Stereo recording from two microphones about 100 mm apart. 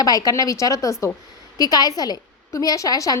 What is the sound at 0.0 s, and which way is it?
A woman's voice, 40° left (ahead or behind).